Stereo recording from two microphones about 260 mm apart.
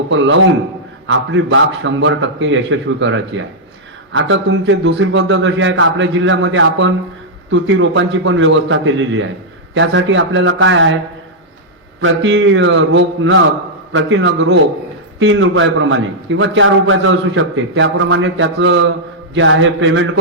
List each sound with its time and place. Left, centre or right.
0.1 s a man's voice: right
11.9 s a man's voice: right